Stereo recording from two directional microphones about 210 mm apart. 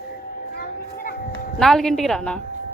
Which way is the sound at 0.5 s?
45° left (ahead or behind).